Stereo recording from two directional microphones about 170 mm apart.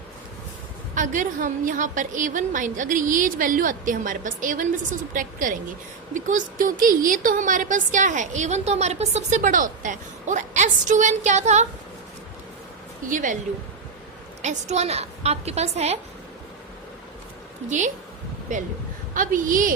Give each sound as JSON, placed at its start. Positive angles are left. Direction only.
{"t": 0.9, "sound": "a woman's voice", "side_deg": -50}
{"t": 13.1, "sound": "a woman's voice", "side_deg": -50}
{"t": 14.4, "sound": "a woman's voice", "side_deg": -40}
{"t": 17.7, "sound": "a woman's voice", "side_deg": -45}